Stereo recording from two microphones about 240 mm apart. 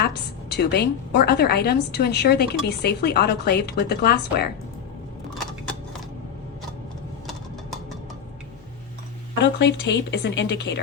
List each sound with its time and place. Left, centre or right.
0.5 s a woman's voice: left
9.4 s a woman's voice: left